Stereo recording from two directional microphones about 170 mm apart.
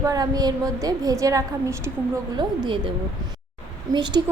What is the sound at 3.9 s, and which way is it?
Speech, 25° right (ahead or behind).